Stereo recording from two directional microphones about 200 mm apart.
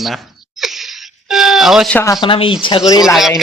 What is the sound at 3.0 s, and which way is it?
Speech, centre (ahead or behind).